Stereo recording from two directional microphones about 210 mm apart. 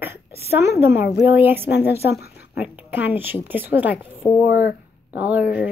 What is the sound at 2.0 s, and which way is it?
Speech, 50° left (ahead or behind).